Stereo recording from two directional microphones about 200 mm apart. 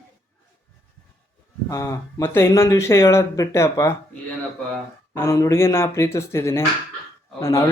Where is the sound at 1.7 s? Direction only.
15° left (ahead or behind).